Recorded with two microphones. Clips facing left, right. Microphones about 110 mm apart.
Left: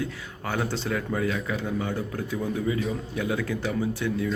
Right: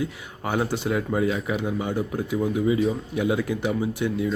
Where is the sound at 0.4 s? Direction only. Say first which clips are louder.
Right 4 dB; 20° right (ahead or behind).